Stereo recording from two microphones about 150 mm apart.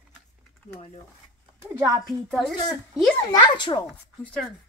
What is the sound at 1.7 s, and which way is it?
Speech, 25° right (ahead or behind).